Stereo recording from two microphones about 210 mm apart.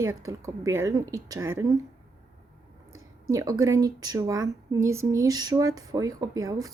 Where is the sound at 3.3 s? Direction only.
15° right (ahead or behind).